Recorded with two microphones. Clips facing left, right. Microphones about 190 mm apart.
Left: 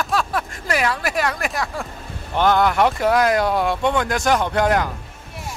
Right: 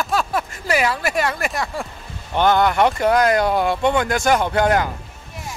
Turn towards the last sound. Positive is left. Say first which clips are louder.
# right 1 dB
turn(degrees=0)  # may be behind; listen again after turning